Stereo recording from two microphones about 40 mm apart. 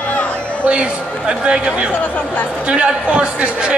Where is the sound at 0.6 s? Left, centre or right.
Right.